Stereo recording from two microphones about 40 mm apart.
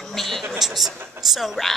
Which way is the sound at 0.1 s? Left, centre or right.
Centre.